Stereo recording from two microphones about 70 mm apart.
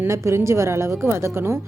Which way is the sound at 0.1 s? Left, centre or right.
Right.